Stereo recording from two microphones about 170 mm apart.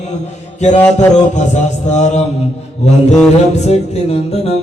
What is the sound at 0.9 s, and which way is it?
Mantra, 40° left (ahead or behind).